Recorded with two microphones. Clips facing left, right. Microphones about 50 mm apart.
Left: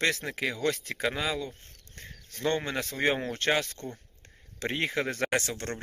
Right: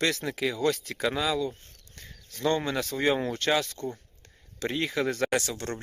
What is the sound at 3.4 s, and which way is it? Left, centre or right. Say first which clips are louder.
Speech: even; left.